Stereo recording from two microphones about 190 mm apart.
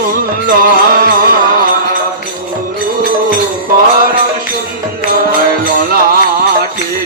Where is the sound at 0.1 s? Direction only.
50° right (ahead or behind).